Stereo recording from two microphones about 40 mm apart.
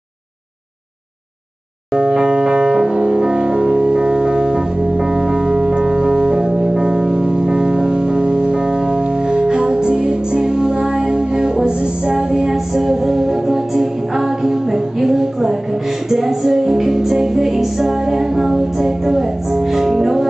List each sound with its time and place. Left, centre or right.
2.0 s piano: centre
16.1 s music: centre